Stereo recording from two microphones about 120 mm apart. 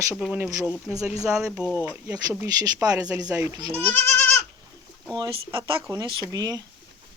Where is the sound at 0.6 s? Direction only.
15° left (ahead or behind).